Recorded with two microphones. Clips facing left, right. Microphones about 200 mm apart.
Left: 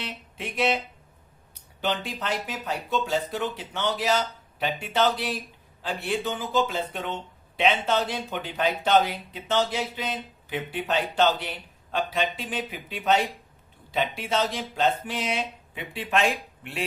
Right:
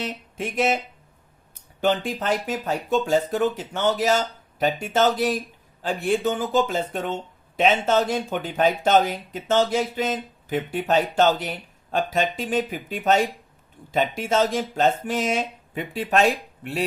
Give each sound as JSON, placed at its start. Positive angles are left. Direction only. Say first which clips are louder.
{"t": 0.0, "sound": "speech", "louder": "right 6 dB", "side_deg": -45}
{"t": 1.8, "sound": "speech", "louder": "right 6 dB", "side_deg": -45}